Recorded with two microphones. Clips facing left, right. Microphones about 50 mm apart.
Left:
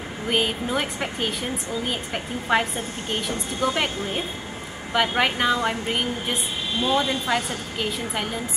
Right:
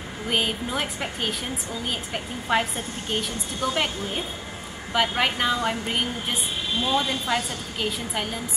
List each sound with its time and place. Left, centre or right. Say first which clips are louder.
0.3 s a woman's voice: left 2 dB; centre